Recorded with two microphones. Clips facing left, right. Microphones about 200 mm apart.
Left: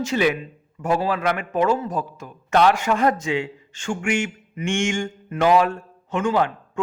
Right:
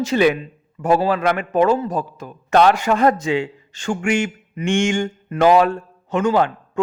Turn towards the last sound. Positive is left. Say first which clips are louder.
# right 4 dB
turn(degrees=-40)  # may be behind; listen again after turning